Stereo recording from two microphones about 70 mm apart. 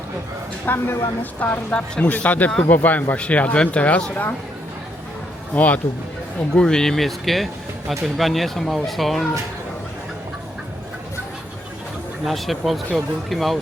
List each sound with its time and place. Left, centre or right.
0.6 s speech: left
5.5 s speech: left
6.5 s speech: centre
12.2 s speech: centre